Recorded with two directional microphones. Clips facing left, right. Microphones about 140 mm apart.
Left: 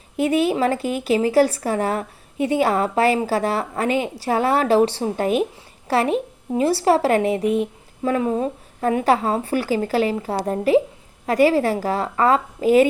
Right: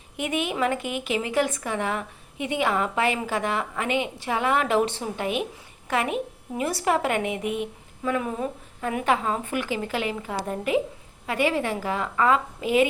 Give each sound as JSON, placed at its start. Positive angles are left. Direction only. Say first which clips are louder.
{"t": 0.2, "sound": "speech", "louder": "left 7 dB", "side_deg": 35}